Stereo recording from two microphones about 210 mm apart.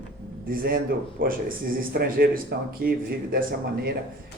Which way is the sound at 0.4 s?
45° right (ahead or behind).